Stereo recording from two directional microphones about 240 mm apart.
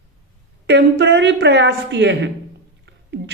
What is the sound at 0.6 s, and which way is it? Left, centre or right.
Speech, right.